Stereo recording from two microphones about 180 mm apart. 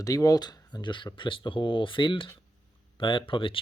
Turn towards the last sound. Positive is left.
turn(degrees=30)  # may be behind; listen again after turning